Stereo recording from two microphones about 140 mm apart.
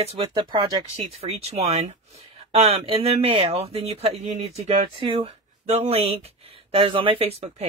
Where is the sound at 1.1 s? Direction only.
50° right (ahead or behind).